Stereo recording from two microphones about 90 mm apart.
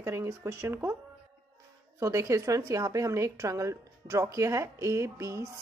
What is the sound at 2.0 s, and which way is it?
A woman's voice, 35° right (ahead or behind).